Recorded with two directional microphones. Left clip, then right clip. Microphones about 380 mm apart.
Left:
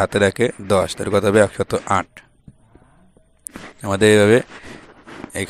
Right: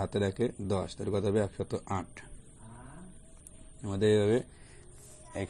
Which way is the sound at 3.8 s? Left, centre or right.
Left.